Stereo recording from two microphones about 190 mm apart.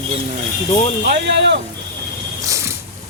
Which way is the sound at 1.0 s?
65° right (ahead or behind).